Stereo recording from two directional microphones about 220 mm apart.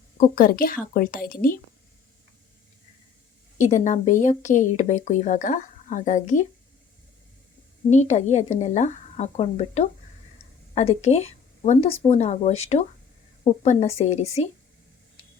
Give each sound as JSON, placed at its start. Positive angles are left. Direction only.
{"t": 0.2, "sound": "speech", "side_deg": 40}
{"t": 3.6, "sound": "speech", "side_deg": 35}
{"t": 7.9, "sound": "speech", "side_deg": 30}